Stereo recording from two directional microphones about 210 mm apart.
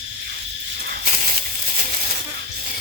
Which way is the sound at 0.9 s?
35° right (ahead or behind).